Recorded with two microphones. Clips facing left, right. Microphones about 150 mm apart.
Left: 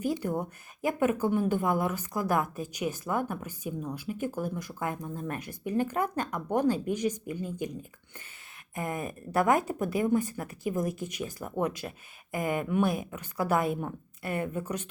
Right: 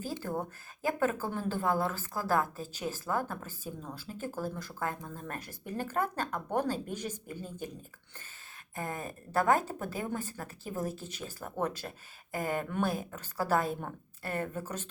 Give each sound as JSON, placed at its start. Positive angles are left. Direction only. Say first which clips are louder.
{"t": 0.0, "sound": "speech", "louder": "left 6 dB", "side_deg": 20}